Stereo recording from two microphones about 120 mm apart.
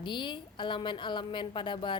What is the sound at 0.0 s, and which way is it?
A woman's voice, 40° left (ahead or behind).